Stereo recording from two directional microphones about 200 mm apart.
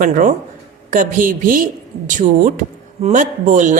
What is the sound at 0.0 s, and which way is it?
Speech, 40° right (ahead or behind).